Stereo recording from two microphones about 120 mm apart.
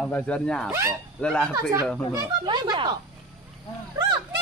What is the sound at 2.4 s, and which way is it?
Speech, 40° right (ahead or behind).